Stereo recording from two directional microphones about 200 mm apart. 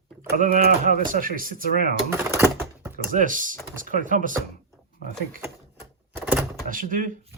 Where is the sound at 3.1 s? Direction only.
40° right (ahead or behind).